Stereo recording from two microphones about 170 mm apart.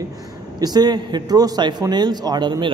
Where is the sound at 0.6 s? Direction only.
25° right (ahead or behind).